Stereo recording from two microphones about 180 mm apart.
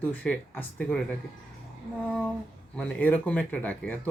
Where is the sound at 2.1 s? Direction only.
5° left (ahead or behind).